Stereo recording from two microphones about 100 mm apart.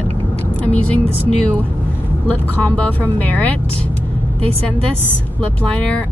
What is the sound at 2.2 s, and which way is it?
Speech, 15° left (ahead or behind).